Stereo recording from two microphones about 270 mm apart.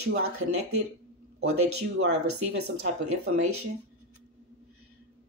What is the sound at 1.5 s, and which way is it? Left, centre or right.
Speech, right.